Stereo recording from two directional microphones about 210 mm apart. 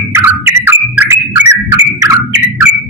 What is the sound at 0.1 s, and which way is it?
Bird, 10° right (ahead or behind).